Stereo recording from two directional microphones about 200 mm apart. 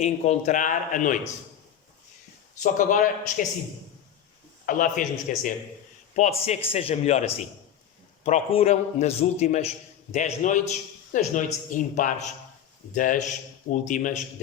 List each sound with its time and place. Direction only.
0.0 s a man's voice: 35° left (ahead or behind)
2.7 s a man's voice: 40° left (ahead or behind)
4.6 s a man's voice: 40° left (ahead or behind)